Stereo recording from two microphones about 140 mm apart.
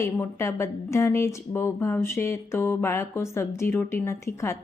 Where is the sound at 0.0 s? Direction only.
20° left (ahead or behind).